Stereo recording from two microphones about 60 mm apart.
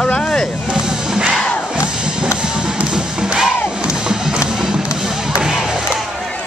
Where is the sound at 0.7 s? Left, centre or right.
Centre.